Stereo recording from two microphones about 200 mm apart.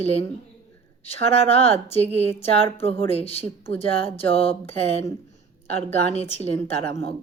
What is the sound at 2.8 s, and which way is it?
Speech, 30° left (ahead or behind).